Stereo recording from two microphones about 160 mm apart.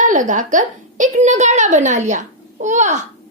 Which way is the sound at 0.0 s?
50° right (ahead or behind).